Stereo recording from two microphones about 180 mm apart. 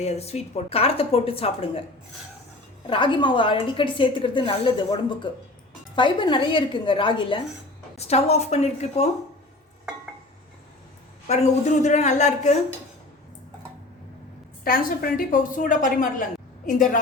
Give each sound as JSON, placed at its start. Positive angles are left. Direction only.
{"t": 0.0, "sound": "speech", "side_deg": 35}
{"t": 2.8, "sound": "a woman's voice", "side_deg": 25}
{"t": 11.3, "sound": "speech", "side_deg": 40}
{"t": 14.6, "sound": "a woman's voice", "side_deg": 55}